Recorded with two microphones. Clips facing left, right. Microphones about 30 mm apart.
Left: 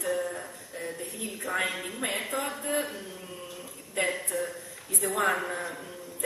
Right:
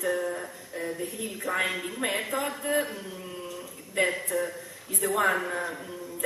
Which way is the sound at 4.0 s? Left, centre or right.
Centre.